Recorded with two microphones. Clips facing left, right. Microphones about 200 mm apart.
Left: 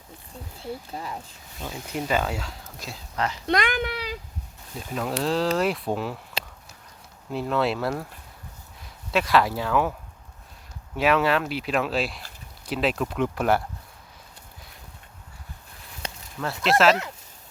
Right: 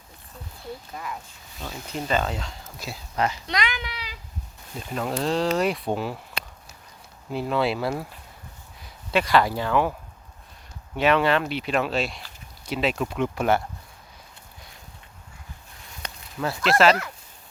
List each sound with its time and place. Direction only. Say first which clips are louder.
0.9 s speech: left 1 dB; 30° left (ahead or behind)
1.6 s speech: left 1 dB; 10° left (ahead or behind)
2.8 s speech: right 3 dB; 10° right (ahead or behind)
3.4 s speech: left 5 dB; 50° left (ahead or behind)
4.8 s speech: even; centre (ahead or behind)
7.3 s speech: even; 5° right (ahead or behind)
9.1 s speech: right 1 dB; centre (ahead or behind)
10.9 s speech: right 1 dB; 5° left (ahead or behind)
16.0 s a sound: left 3 dB; 25° left (ahead or behind)
16.4 s speech: right 1 dB; centre (ahead or behind)